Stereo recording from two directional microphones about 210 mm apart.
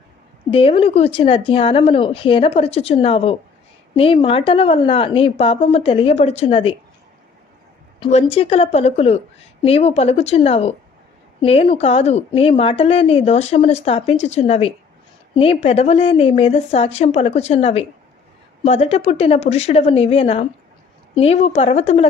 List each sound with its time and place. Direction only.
0.5 s a woman's voice: 25° left (ahead or behind)
7.9 s a woman's voice: 25° left (ahead or behind)